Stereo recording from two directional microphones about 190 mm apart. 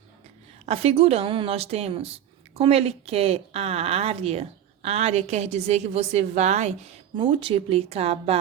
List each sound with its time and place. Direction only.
0.6 s a woman's voice: 30° right (ahead or behind)